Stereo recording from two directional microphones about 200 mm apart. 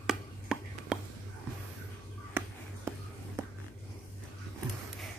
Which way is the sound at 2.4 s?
10° right (ahead or behind).